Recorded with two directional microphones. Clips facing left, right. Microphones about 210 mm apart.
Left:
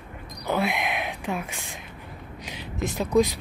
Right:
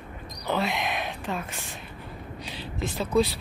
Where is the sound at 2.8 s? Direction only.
15° left (ahead or behind).